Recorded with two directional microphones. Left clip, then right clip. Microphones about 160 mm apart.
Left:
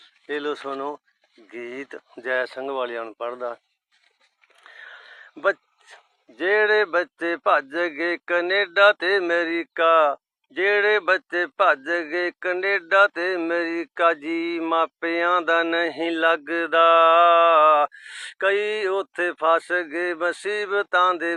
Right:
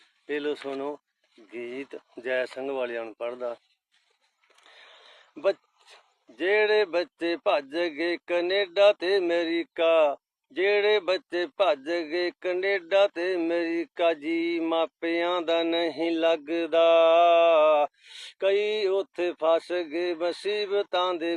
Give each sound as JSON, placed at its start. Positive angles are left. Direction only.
{"t": 0.3, "sound": "speech", "side_deg": -5}
{"t": 1.6, "sound": "speech", "side_deg": 50}
{"t": 2.1, "sound": "speech", "side_deg": -5}
{"t": 4.7, "sound": "whispering", "side_deg": -10}
{"t": 6.3, "sound": "speech", "side_deg": 5}